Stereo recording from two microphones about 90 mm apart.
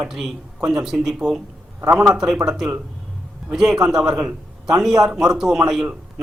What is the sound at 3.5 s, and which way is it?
A man's voice, 5° right (ahead or behind).